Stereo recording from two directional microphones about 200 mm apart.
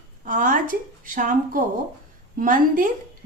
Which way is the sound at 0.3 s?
40° right (ahead or behind).